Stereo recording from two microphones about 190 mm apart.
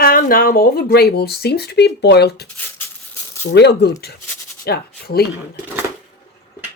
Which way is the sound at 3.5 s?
60° left (ahead or behind).